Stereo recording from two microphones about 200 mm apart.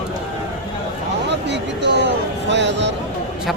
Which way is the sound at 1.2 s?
60° right (ahead or behind).